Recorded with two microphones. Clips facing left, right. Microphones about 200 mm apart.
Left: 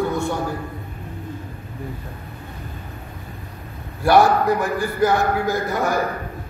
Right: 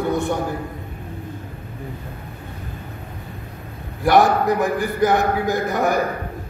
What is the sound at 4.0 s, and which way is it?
A man's voice, 20° right (ahead or behind).